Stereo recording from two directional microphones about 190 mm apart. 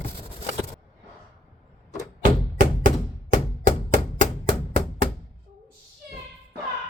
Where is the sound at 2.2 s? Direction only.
45° right (ahead or behind).